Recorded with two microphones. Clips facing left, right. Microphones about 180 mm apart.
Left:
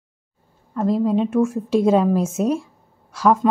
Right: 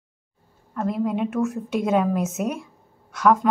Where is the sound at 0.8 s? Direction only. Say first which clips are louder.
Left 5 dB; 25° left (ahead or behind).